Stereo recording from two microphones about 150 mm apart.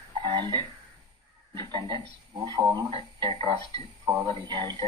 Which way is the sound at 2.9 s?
40° right (ahead or behind).